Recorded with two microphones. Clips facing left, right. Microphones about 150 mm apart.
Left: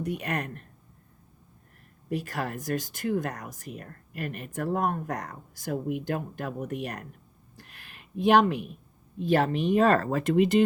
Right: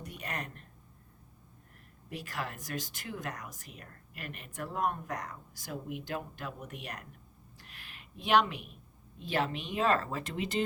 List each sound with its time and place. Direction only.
0.0 s speech: 60° left (ahead or behind)
2.0 s speech: 45° left (ahead or behind)
7.5 s a sound: 50° left (ahead or behind)
9.1 s speech: 45° left (ahead or behind)